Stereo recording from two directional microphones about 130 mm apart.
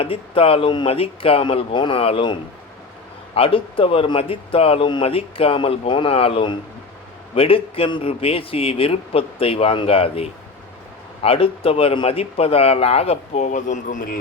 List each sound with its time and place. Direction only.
0.0 s speech: 45° left (ahead or behind); by 14.2 s 90° left